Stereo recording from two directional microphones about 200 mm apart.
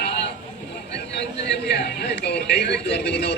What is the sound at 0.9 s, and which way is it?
Speech, 60° left (ahead or behind).